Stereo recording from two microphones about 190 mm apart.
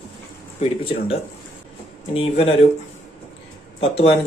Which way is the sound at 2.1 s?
30° left (ahead or behind).